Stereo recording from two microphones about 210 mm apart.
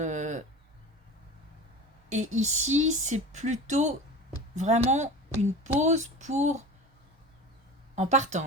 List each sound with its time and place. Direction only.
0.0 s a sound: 35° right (ahead or behind)
2.3 s speech: 35° right (ahead or behind)
7.9 s speech: 35° right (ahead or behind)